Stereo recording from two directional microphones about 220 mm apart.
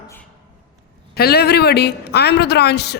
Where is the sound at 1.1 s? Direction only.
45° left (ahead or behind).